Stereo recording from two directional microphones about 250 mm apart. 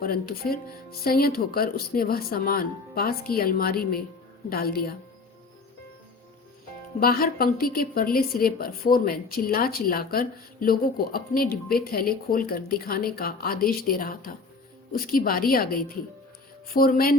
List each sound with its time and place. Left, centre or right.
0.0 s a woman's voice: left
7.0 s a woman's voice: left